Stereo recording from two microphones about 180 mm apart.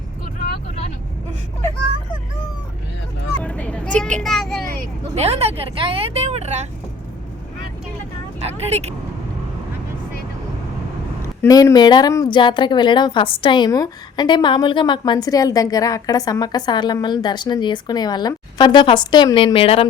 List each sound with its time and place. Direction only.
3.4 s vehicle: 5° left (ahead or behind)
4.2 s speech: centre (ahead or behind)
5.2 s speech: 35° right (ahead or behind)
8.4 s speech: 35° right (ahead or behind)
11.4 s a woman's voice: 20° left (ahead or behind)